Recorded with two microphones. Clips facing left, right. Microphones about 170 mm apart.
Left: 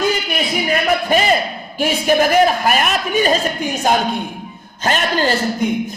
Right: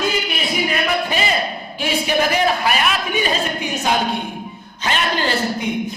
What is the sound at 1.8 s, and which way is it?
A man's voice, 45° left (ahead or behind).